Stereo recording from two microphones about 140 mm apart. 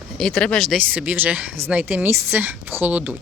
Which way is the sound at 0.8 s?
10° right (ahead or behind).